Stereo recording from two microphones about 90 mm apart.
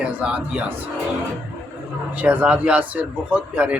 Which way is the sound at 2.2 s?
20° right (ahead or behind).